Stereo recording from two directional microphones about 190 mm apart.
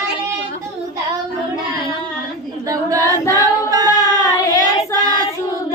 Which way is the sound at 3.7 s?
20° right (ahead or behind).